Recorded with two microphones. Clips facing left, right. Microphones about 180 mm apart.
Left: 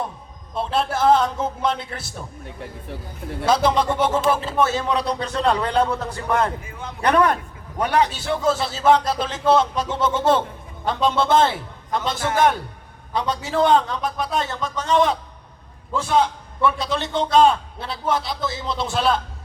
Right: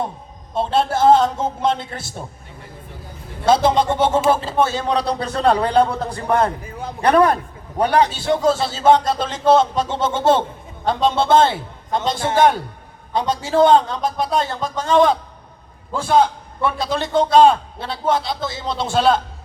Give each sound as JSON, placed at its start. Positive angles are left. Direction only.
{"t": 0.5, "sound": "a man's voice", "side_deg": -25}
{"t": 3.4, "sound": "a man's voice", "side_deg": -25}